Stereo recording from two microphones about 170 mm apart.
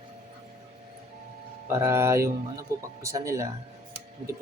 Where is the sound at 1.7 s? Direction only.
15° right (ahead or behind).